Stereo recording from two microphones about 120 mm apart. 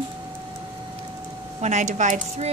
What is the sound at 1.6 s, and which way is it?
Speech, 75° right (ahead or behind).